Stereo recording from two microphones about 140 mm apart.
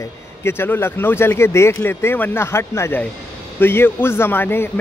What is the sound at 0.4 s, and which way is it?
Speech, 15° left (ahead or behind).